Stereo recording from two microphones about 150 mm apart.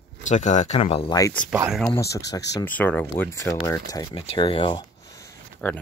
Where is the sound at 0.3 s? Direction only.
55° left (ahead or behind).